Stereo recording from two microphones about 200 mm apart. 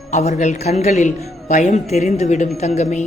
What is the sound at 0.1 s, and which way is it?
A woman's voice, 35° left (ahead or behind).